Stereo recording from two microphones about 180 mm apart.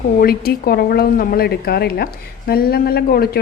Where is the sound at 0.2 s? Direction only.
55° left (ahead or behind).